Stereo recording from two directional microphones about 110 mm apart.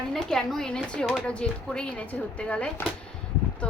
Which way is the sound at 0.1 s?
5° left (ahead or behind).